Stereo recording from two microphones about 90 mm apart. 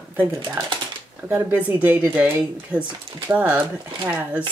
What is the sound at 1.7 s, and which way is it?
Speech, 20° right (ahead or behind).